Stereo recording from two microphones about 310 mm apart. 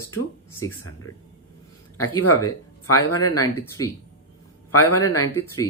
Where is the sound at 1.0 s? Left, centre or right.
Left.